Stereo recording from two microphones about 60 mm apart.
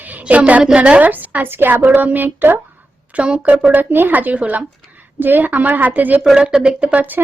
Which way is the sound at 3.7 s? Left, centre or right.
Right.